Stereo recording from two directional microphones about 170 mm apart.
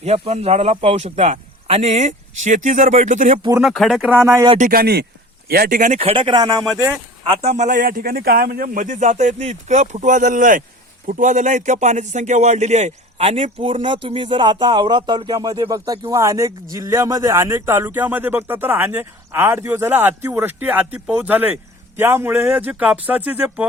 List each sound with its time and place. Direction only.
0.0 s a man's voice: 40° right (ahead or behind)
3.6 s speech: centre (ahead or behind)
4.5 s a man's voice: 55° right (ahead or behind); by 6.7 s 25° right (ahead or behind)
7.3 s a man's voice: 40° right (ahead or behind); by 23.6 s 10° right (ahead or behind)